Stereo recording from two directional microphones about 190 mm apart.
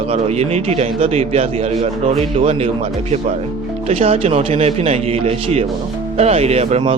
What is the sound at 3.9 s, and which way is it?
Speech, 30° right (ahead or behind).